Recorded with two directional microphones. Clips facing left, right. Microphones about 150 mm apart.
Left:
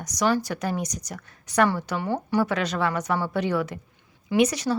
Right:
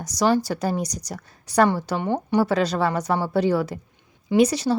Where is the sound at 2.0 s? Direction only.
20° right (ahead or behind).